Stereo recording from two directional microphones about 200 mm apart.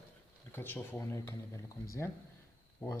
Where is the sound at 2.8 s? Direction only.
15° left (ahead or behind).